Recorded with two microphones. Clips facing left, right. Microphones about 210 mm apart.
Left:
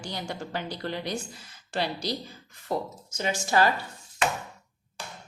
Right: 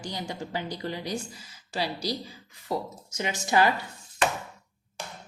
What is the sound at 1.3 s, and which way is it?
Speech, 55° left (ahead or behind).